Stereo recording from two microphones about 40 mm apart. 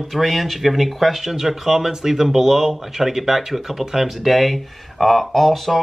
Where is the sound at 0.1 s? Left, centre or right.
Centre.